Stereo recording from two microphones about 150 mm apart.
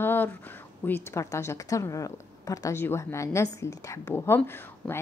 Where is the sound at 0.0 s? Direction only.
15° left (ahead or behind).